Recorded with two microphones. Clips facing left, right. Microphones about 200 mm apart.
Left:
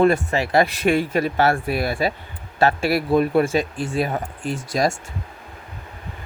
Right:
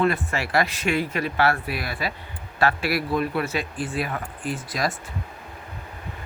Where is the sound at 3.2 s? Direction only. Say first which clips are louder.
Left 7 dB; 45° left (ahead or behind).